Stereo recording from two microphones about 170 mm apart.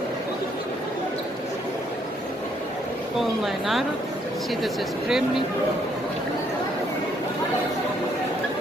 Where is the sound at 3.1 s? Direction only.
Centre (ahead or behind).